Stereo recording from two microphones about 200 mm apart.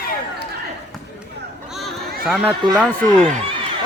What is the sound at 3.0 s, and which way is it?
Speech, 5° left (ahead or behind).